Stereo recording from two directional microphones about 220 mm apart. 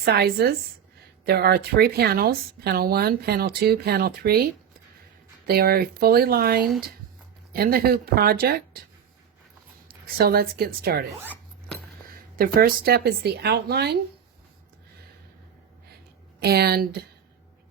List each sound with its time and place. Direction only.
0.0 s a woman's voice: 45° right (ahead or behind)
5.5 s a woman's voice: 45° right (ahead or behind)
6.6 s speech: centre (ahead or behind)
7.5 s a woman's voice: 45° right (ahead or behind)
10.2 s a woman's voice: 45° right (ahead or behind)
12.4 s a woman's voice: 40° right (ahead or behind)
16.4 s a woman's voice: 45° right (ahead or behind)